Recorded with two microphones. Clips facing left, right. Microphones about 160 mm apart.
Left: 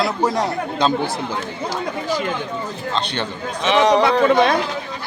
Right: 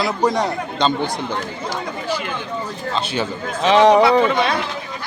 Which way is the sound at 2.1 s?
40° left (ahead or behind).